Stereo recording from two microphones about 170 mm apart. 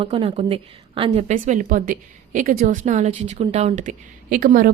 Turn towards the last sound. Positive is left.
turn(degrees=-55)  # may be behind; listen again after turning